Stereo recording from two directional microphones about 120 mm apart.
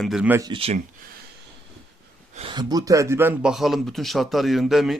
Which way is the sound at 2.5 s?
35° right (ahead or behind).